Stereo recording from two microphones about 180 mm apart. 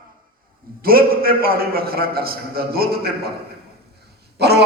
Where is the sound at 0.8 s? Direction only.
55° right (ahead or behind).